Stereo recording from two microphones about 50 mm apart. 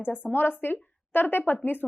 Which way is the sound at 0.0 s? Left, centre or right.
Left.